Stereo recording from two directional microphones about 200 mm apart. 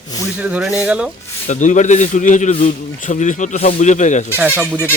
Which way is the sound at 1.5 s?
40° left (ahead or behind).